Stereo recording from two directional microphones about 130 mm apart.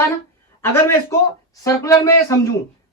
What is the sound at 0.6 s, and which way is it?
Speech, 20° left (ahead or behind).